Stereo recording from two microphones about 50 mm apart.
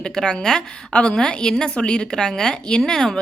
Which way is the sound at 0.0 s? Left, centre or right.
Centre.